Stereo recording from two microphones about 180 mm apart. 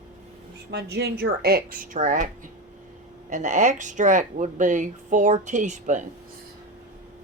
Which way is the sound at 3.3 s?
45° right (ahead or behind).